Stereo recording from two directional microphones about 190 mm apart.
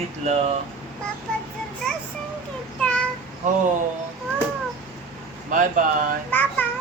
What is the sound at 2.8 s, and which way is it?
Child singing, 5° left (ahead or behind).